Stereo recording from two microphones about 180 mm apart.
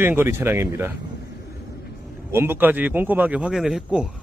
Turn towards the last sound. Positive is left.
turn(degrees=-5)  # may be behind; listen again after turning